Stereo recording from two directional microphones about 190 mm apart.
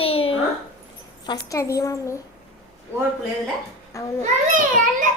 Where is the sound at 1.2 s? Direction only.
20° left (ahead or behind).